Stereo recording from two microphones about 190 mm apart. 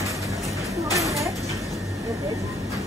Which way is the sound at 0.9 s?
15° right (ahead or behind).